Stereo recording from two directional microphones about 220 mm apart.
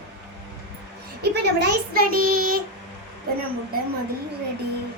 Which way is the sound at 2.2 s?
85° right.